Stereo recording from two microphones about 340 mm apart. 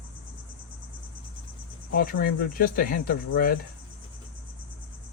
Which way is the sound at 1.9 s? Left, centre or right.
Left.